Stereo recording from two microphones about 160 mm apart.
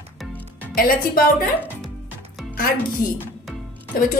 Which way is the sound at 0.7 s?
65° left (ahead or behind).